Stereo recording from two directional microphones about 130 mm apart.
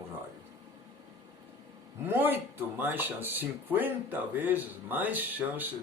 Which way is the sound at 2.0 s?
15° right (ahead or behind).